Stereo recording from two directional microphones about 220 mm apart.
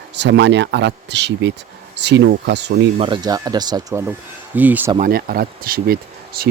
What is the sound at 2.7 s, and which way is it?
Speech, 25° right (ahead or behind).